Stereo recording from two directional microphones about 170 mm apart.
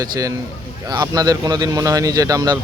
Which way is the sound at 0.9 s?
20° right (ahead or behind).